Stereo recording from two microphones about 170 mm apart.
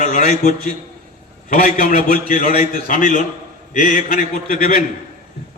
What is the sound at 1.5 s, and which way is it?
A man's voice, 55° left (ahead or behind).